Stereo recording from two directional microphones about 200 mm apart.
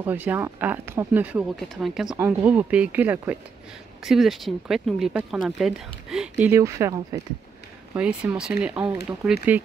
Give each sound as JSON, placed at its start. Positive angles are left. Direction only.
{"t": 0.0, "sound": "speech", "side_deg": -10}
{"t": 6.4, "sound": "speech", "side_deg": -15}